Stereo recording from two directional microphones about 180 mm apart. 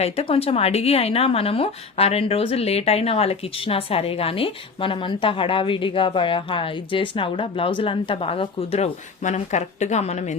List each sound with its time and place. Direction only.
0.0 s a woman's voice: 35° left (ahead or behind)